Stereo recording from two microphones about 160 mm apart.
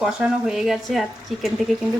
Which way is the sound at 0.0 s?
5° right (ahead or behind).